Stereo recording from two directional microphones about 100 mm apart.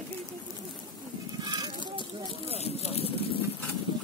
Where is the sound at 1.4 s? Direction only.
40° right (ahead or behind).